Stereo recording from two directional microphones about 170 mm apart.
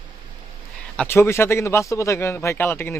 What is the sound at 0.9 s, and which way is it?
A man's voice, 10° left (ahead or behind).